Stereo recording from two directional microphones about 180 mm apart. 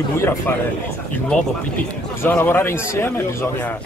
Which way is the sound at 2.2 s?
10° left (ahead or behind).